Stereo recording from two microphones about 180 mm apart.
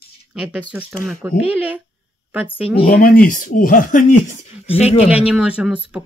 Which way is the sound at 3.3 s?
50° left (ahead or behind).